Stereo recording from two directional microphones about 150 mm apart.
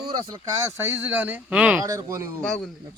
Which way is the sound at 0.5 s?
20° right (ahead or behind).